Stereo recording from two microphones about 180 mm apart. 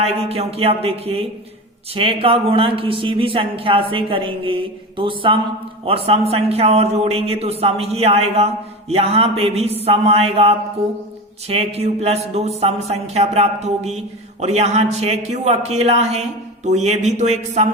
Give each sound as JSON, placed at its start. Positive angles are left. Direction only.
{"t": 0.0, "sound": "a man's voice", "side_deg": -35}